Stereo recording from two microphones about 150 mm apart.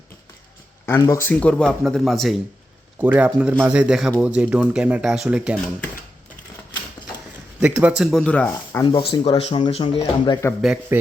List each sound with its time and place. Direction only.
0.9 s speech: 20° left (ahead or behind)
1.3 s speech: 10° left (ahead or behind)
7.6 s speech: 10° right (ahead or behind); by 8.8 s 10° left (ahead or behind)
8.8 s speech: 30° left (ahead or behind)
10.9 s speech: 15° right (ahead or behind)